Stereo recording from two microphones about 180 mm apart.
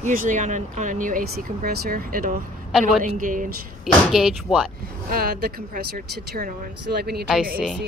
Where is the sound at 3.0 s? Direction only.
50° right (ahead or behind).